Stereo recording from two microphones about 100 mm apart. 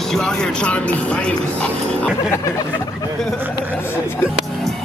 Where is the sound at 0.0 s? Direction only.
5° left (ahead or behind).